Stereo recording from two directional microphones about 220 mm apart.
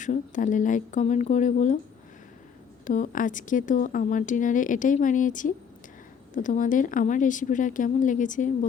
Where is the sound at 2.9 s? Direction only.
35° left (ahead or behind).